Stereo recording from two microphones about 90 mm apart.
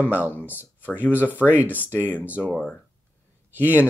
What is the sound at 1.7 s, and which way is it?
Speech, 20° left (ahead or behind).